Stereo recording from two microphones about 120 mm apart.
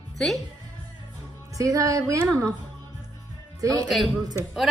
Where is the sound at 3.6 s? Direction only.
30° right (ahead or behind).